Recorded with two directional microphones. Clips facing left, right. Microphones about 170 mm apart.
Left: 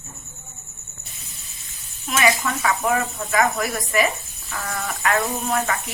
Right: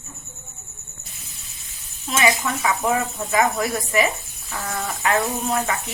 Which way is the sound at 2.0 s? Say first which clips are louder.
Even; 20° right (ahead or behind).